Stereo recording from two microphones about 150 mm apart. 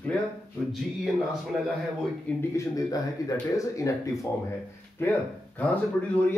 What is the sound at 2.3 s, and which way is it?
Speech, 10° left (ahead or behind).